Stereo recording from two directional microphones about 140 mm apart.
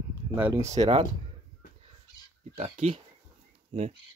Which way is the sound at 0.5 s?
55° right (ahead or behind).